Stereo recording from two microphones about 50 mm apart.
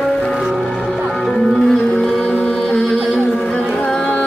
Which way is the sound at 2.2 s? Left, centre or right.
Left.